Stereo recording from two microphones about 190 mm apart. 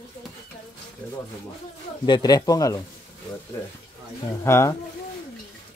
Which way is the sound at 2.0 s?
20° left (ahead or behind).